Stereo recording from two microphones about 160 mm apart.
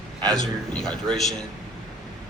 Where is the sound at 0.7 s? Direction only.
5° left (ahead or behind).